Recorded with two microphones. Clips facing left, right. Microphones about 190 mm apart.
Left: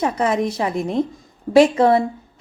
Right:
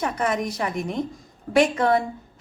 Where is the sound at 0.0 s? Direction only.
30° left (ahead or behind).